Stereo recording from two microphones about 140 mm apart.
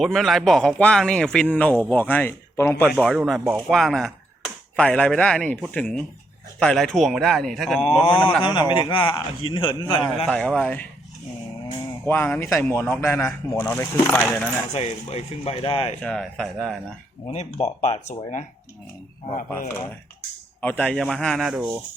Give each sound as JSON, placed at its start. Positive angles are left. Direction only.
{"t": 0.0, "sound": "speech", "side_deg": 0}
{"t": 2.9, "sound": "speech", "side_deg": 0}
{"t": 8.4, "sound": "a man's voice", "side_deg": 35}
{"t": 10.2, "sound": "speech", "side_deg": 5}
{"t": 12.0, "sound": "speech", "side_deg": 15}
{"t": 14.7, "sound": "speech", "side_deg": 50}
{"t": 16.0, "sound": "speech", "side_deg": 5}
{"t": 17.2, "sound": "speech", "side_deg": 50}
{"t": 19.5, "sound": "speech", "side_deg": 15}